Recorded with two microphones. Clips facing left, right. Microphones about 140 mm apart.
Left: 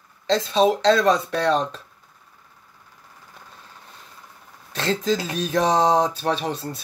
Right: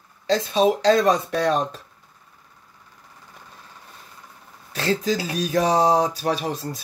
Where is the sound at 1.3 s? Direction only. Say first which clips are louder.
Even; 10° right (ahead or behind).